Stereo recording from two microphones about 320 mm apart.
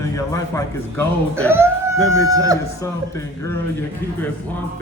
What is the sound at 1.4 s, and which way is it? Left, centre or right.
Speech, centre.